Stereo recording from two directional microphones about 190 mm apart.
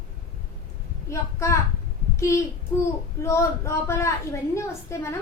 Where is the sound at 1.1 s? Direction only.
15° left (ahead or behind).